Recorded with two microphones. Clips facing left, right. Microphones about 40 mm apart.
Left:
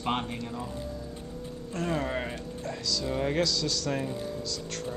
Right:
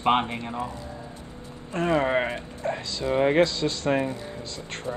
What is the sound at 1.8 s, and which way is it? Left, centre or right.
Speech, right.